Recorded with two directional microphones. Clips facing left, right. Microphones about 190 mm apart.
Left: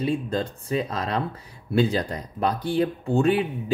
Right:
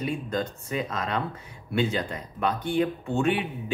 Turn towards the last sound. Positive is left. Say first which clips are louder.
# left 4 dB
turn(degrees=35)  # may be behind; listen again after turning